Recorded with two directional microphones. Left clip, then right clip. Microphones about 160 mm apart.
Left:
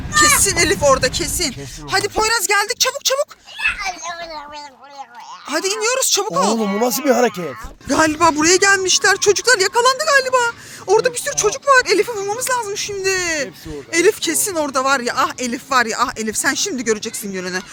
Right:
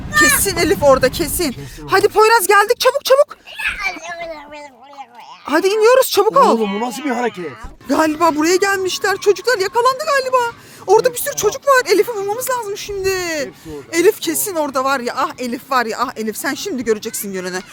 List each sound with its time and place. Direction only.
0.4 s speech: 30° right (ahead or behind); by 3.2 s 50° right (ahead or behind)
5.5 s speech: 50° right (ahead or behind)
6.7 s speech: 90° left
7.9 s speech: 10° right (ahead or behind)
10.8 s speech: 25° right (ahead or behind)
17.3 s speech: 25° right (ahead or behind)